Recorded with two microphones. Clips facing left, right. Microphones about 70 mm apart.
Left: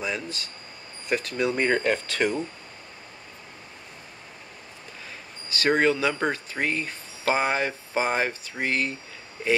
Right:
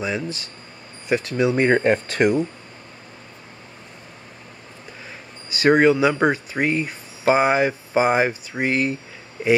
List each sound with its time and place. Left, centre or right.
0.0 s speech: centre; by 2.2 s right
5.5 s speech: centre